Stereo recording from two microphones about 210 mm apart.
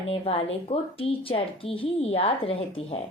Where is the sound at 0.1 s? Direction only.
25° left (ahead or behind).